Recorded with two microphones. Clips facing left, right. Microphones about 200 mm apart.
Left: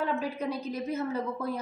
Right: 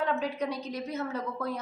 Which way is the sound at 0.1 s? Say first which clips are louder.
Even; 5° left (ahead or behind).